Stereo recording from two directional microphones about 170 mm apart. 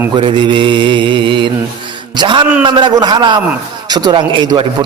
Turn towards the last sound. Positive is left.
turn(degrees=-25)  # may be behind; listen again after turning